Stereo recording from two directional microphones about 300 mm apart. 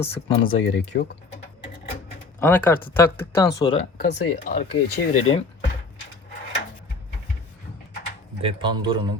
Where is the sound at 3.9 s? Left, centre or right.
Left.